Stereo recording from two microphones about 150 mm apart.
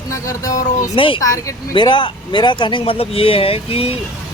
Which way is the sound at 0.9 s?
35° left (ahead or behind).